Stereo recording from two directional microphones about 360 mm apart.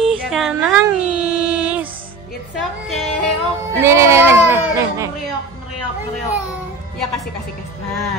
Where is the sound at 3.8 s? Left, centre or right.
Centre.